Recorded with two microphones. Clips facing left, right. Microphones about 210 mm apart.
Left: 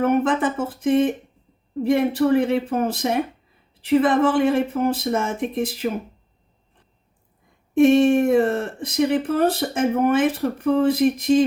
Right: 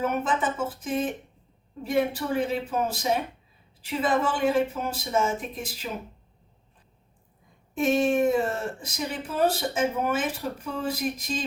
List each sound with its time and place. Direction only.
0.0 s speech: 60° left (ahead or behind)
7.7 s speech: 55° left (ahead or behind)